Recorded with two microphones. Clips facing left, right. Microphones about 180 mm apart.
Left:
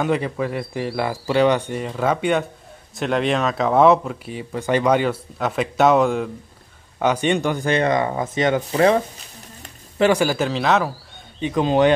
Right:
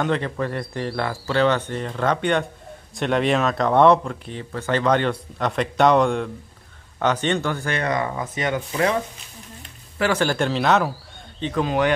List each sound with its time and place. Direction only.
0.0 s speech: 10° left (ahead or behind); by 8.9 s 30° left (ahead or behind)
10.1 s speech: 5° left (ahead or behind)
11.6 s speech: 25° left (ahead or behind)